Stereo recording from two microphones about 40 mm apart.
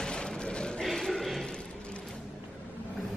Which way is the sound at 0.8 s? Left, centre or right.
Centre.